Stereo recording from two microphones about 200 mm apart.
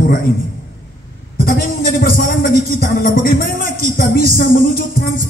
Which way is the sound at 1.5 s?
45° left (ahead or behind).